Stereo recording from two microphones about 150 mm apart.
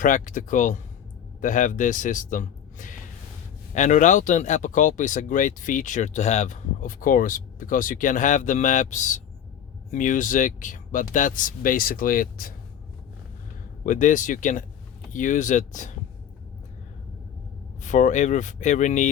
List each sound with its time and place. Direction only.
0.0 s a man's voice: 60° left (ahead or behind)
13.8 s speech: 60° left (ahead or behind)
17.8 s speech: 55° left (ahead or behind)